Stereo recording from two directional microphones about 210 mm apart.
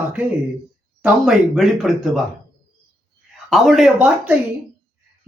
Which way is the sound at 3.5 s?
Centre (ahead or behind).